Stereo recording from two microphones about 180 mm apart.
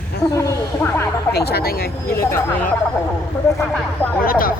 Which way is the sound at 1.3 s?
60° left (ahead or behind).